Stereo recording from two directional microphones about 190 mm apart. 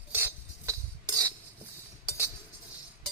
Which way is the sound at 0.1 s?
15° right (ahead or behind).